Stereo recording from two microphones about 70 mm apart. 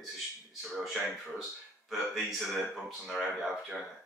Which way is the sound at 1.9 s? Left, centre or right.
Centre.